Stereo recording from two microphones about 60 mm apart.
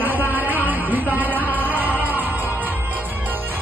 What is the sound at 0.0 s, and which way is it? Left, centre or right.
Music, right.